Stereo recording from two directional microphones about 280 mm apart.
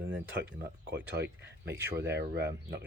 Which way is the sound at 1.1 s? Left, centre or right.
Right.